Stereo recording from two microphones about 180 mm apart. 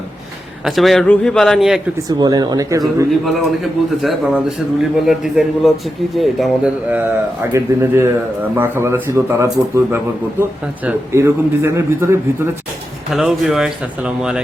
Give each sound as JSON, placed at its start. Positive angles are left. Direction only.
{"t": 0.6, "sound": "a man's voice", "side_deg": 0}
{"t": 2.0, "sound": "speech", "side_deg": -20}
{"t": 3.2, "sound": "a man's voice", "side_deg": 0}
{"t": 7.5, "sound": "speech", "side_deg": -15}
{"t": 13.1, "sound": "a man's voice", "side_deg": 0}